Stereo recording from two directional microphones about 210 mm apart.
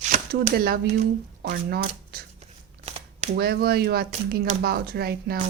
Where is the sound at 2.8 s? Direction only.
30° right (ahead or behind).